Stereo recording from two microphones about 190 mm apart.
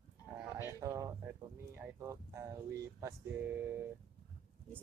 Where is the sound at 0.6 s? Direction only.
15° right (ahead or behind).